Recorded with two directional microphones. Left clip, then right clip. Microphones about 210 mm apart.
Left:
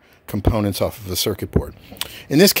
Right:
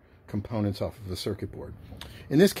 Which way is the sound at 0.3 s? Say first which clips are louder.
Left 11 dB; 40° left (ahead or behind).